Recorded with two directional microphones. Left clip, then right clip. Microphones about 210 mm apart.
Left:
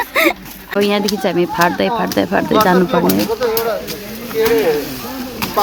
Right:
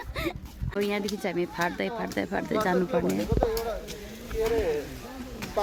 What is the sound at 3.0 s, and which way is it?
Speech, 50° left (ahead or behind).